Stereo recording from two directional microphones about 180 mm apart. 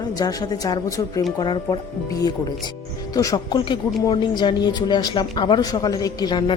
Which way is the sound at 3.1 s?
20° left (ahead or behind).